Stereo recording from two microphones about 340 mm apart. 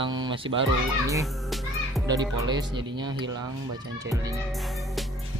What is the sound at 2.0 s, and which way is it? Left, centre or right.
Music, centre.